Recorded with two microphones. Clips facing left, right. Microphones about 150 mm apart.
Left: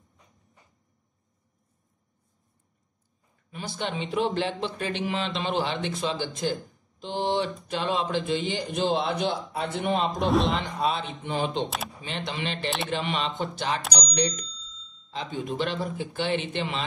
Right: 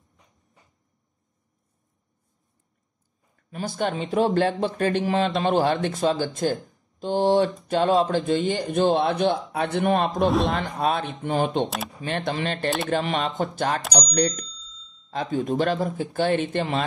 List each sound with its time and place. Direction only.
3.4 s speech: 45° right (ahead or behind)
10.2 s a man's voice: centre (ahead or behind)
10.5 s speech: 50° right (ahead or behind)
11.6 s a man's voice: centre (ahead or behind)
12.0 s speech: 50° right (ahead or behind)